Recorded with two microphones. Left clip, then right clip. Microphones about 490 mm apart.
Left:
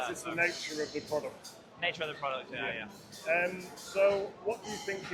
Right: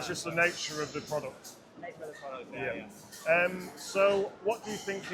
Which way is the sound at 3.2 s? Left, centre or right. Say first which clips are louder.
Right 4 dB; right.